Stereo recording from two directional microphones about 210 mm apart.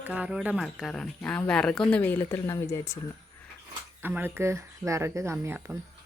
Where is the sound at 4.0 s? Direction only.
10° right (ahead or behind).